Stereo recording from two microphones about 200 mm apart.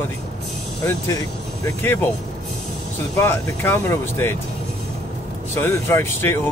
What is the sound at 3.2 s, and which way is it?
Speech, 10° left (ahead or behind).